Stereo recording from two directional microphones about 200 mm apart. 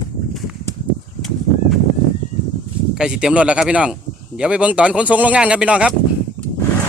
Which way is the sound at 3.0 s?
5° right (ahead or behind).